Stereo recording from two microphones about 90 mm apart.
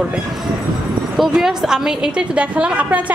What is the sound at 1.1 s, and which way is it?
A woman's voice, 5° right (ahead or behind).